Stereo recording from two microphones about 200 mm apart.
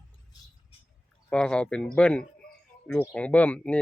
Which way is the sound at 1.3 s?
5° left (ahead or behind).